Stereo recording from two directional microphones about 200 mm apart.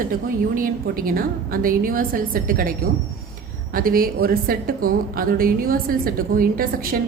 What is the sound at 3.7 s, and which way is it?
A woman's voice, 45° right (ahead or behind).